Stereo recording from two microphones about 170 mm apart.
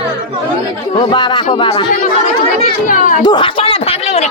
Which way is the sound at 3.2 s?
30° left (ahead or behind).